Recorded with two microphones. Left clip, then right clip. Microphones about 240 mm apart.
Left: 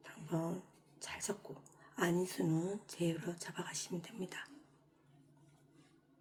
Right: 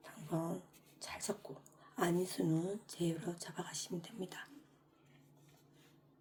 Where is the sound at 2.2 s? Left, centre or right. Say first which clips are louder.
Even; centre.